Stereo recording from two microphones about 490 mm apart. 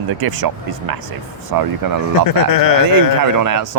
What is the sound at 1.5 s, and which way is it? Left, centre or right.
Speech, right.